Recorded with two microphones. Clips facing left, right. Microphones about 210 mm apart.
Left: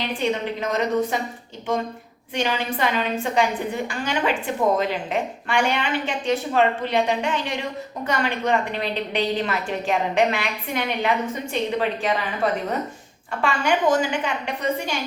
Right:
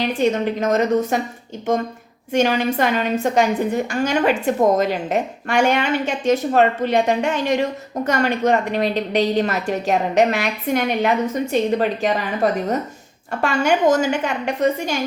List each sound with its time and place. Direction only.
0.0 s a woman's voice: 45° right (ahead or behind)
2.3 s a woman's voice: 45° right (ahead or behind)